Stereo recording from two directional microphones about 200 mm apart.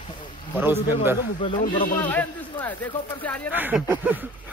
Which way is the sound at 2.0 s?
10° left (ahead or behind).